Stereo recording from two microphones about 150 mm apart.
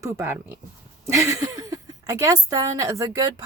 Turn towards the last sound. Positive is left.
turn(degrees=-20)  # may be behind; listen again after turning